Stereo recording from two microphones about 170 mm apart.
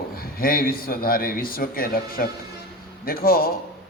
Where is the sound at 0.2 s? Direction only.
60° left (ahead or behind).